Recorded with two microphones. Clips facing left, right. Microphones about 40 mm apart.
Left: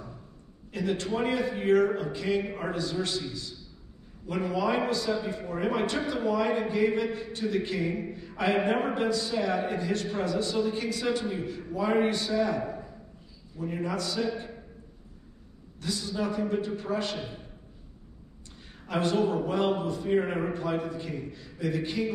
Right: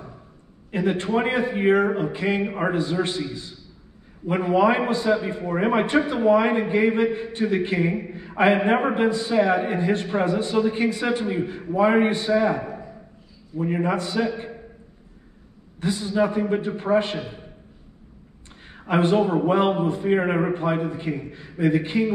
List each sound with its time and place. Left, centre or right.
0.7 s a man's voice: right
15.8 s a man's voice: right
18.7 s a man's voice: right